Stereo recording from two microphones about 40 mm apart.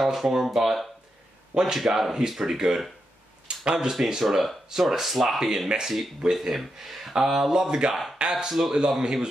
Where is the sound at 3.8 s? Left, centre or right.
Centre.